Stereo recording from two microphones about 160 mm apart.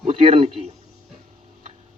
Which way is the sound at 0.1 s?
40° right (ahead or behind).